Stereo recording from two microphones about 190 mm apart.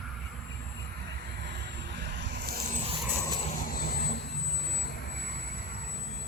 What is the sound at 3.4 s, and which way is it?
Vehicle, 40° left (ahead or behind).